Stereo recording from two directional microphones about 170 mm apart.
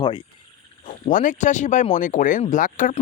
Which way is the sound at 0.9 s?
50° left (ahead or behind).